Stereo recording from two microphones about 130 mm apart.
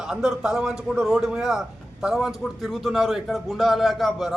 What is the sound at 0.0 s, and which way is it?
Speech, 5° right (ahead or behind).